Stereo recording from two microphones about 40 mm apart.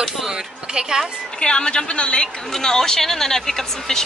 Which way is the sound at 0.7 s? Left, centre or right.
Centre.